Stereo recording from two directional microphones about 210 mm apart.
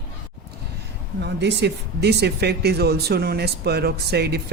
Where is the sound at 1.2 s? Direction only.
55° right (ahead or behind).